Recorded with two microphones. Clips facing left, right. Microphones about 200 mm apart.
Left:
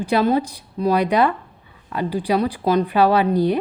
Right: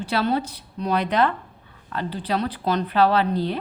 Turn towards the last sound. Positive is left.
turn(degrees=15)  # may be behind; listen again after turning